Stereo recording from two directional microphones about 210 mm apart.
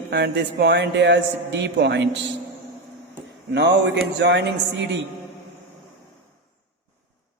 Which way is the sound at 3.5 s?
55° right (ahead or behind).